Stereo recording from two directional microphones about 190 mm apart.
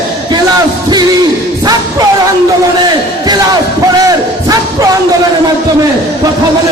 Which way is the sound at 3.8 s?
20° right (ahead or behind).